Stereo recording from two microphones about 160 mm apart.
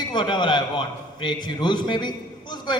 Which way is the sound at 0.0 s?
25° left (ahead or behind).